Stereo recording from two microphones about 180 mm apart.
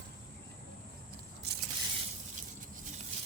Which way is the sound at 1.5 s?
65° right (ahead or behind).